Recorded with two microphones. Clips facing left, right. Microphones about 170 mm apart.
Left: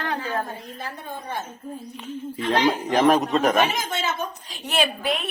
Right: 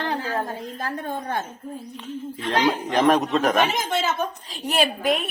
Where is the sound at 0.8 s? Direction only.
50° right (ahead or behind).